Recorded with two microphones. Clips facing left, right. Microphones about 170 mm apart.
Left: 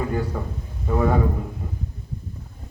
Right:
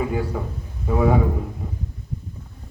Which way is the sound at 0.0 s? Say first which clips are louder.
Right 1 dB; 5° right (ahead or behind).